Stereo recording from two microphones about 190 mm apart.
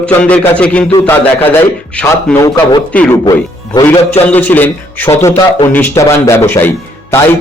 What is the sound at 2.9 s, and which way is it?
Speech, 5° left (ahead or behind).